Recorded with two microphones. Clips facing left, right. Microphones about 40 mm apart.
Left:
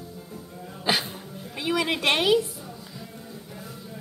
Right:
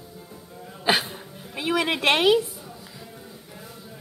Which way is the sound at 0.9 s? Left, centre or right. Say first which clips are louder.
Right 3 dB; centre.